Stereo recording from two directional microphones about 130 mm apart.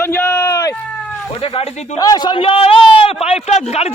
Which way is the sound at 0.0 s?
15° left (ahead or behind).